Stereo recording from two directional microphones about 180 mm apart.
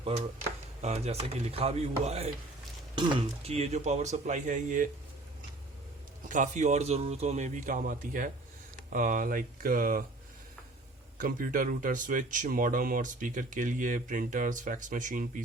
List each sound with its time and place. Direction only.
0.8 s a man's voice: 35° right (ahead or behind)
6.2 s a man's voice: 45° right (ahead or behind)
11.2 s speech: 50° right (ahead or behind)